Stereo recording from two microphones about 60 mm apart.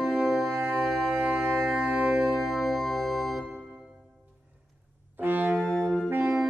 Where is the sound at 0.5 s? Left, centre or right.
Right.